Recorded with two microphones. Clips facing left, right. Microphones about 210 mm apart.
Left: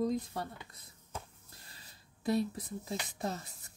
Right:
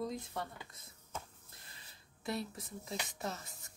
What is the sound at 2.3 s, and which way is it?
Speech, 35° left (ahead or behind).